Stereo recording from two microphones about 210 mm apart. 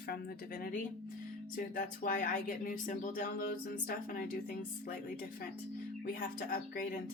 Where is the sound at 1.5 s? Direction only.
40° left (ahead or behind).